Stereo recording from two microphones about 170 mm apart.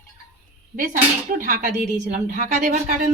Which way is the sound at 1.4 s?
55° right (ahead or behind).